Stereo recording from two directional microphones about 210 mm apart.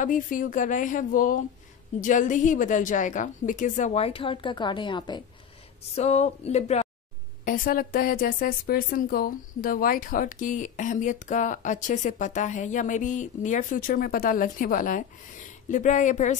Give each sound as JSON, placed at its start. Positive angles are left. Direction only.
{"t": 0.0, "sound": "speech", "side_deg": 40}
{"t": 5.9, "sound": "speech", "side_deg": 30}
{"t": 7.4, "sound": "speech", "side_deg": 45}